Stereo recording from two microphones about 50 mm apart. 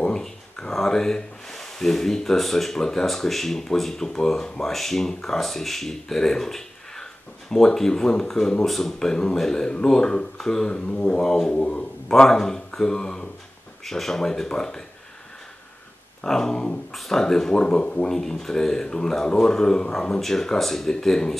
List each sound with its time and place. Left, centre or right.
0.0 s speech: centre
10.9 s a sound: left
12.1 s speech: centre
16.3 s speech: centre
18.0 s speech: centre